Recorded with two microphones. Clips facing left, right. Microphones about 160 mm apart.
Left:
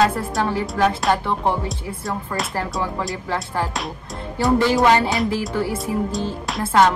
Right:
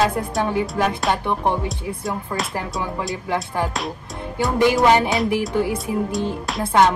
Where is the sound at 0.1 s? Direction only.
20° right (ahead or behind).